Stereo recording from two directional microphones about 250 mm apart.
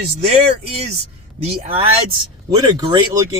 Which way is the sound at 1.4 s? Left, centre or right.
Right.